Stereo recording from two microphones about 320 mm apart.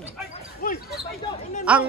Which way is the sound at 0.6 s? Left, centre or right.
Left.